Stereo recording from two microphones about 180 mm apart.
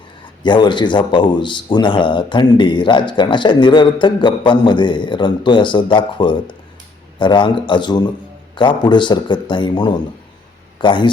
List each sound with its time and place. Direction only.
0.4 s speech: 25° left (ahead or behind)